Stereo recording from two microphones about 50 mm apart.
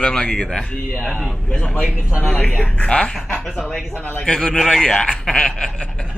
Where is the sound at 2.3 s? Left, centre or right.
Left.